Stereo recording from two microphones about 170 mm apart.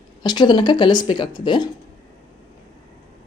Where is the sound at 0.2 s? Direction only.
25° left (ahead or behind).